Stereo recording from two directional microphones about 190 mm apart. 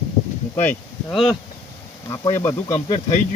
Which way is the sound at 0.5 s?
10° left (ahead or behind).